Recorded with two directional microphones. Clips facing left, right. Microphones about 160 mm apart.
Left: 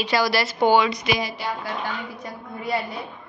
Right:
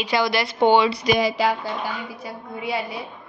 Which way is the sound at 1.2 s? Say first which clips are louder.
Right 8 dB; 90° right.